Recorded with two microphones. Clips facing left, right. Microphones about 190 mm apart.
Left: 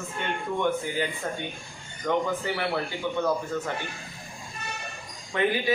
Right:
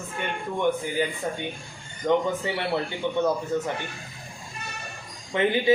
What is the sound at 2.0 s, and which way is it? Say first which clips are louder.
Speech: right 4 dB; 30° right (ahead or behind).